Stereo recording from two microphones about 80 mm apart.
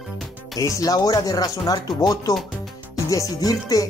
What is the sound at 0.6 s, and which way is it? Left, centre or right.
Speech, left.